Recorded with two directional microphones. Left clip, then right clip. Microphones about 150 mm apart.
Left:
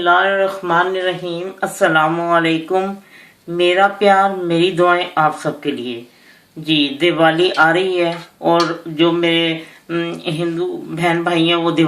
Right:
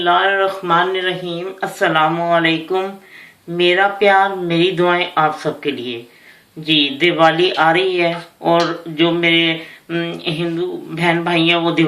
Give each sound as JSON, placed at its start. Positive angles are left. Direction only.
{"t": 0.0, "sound": "speech", "side_deg": 50}